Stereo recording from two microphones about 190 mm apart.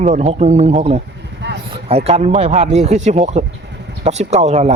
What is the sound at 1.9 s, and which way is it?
A man's voice, 30° right (ahead or behind).